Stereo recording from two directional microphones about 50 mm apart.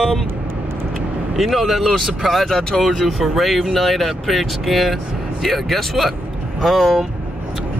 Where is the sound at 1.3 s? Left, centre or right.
Centre.